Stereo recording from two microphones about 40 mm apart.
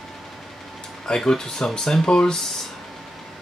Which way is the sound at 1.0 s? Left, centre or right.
Centre.